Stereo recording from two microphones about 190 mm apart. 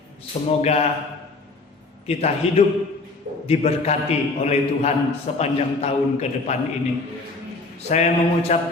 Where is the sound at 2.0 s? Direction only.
35° left (ahead or behind).